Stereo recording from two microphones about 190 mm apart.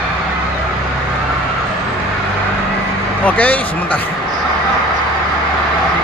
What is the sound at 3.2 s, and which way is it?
Speech, 10° left (ahead or behind).